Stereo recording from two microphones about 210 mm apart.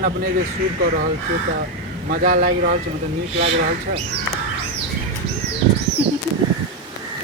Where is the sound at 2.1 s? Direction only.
40° right (ahead or behind).